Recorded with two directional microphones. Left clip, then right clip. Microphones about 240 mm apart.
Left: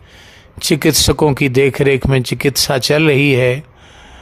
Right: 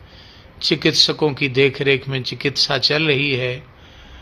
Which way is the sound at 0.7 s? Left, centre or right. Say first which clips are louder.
Left 3 dB; left.